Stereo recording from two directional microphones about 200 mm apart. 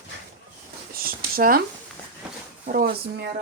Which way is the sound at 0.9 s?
45° right (ahead or behind).